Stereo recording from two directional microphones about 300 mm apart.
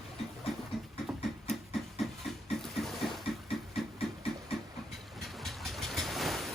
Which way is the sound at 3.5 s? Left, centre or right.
Centre.